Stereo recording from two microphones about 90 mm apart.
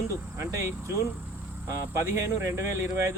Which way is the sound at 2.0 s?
30° right (ahead or behind).